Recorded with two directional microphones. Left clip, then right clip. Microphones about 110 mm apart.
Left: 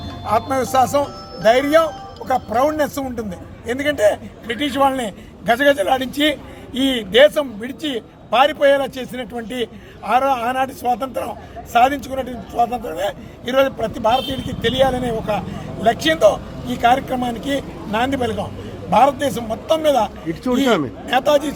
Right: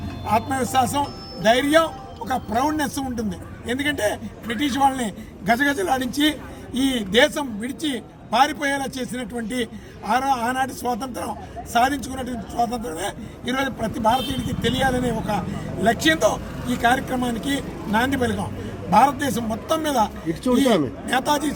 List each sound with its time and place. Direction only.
0.3 s a man's voice: 20° left (ahead or behind)